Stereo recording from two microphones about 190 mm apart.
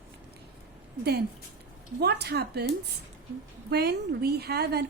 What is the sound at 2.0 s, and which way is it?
Speech, 60° right (ahead or behind).